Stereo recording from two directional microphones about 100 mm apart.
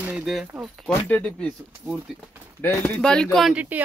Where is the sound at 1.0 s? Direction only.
15° left (ahead or behind).